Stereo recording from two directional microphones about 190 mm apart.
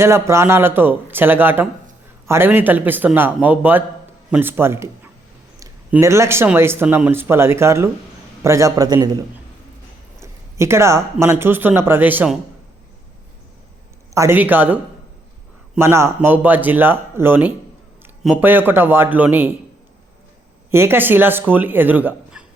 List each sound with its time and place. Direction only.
0.0 s a man's voice: 15° right (ahead or behind)
14.1 s speech: 15° right (ahead or behind)
20.7 s speech: 15° right (ahead or behind)